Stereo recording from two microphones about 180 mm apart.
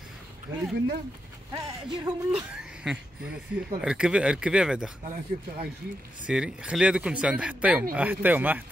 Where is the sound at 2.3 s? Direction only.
5° right (ahead or behind).